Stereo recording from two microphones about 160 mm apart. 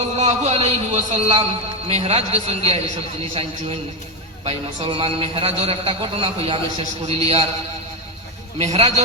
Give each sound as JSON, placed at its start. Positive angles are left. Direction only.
{"t": 0.2, "sound": "a man's voice", "side_deg": -45}
{"t": 4.4, "sound": "a man's voice", "side_deg": -30}
{"t": 8.5, "sound": "a man's voice", "side_deg": -40}